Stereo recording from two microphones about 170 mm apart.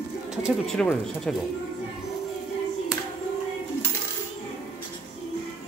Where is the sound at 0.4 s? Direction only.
5° left (ahead or behind).